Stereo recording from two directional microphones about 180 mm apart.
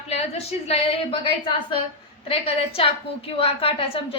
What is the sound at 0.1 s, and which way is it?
A woman's voice, 35° left (ahead or behind).